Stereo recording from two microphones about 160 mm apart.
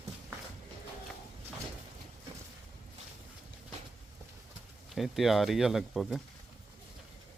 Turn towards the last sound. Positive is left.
turn(degrees=0)  # may be behind; listen again after turning